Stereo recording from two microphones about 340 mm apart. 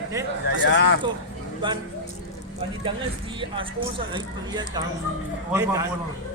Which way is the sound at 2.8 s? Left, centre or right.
Centre.